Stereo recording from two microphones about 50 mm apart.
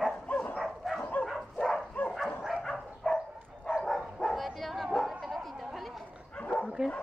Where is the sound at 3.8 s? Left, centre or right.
Centre.